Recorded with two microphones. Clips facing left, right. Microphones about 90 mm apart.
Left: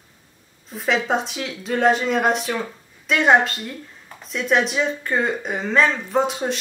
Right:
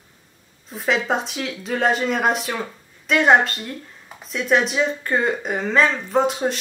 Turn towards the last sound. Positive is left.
turn(degrees=0)  # may be behind; listen again after turning